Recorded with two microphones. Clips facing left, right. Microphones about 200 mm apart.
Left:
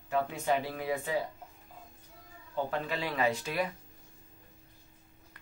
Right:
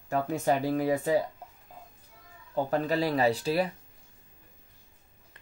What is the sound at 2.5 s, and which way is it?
Speech, 40° right (ahead or behind).